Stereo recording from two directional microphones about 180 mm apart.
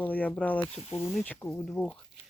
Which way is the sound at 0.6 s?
35° left (ahead or behind).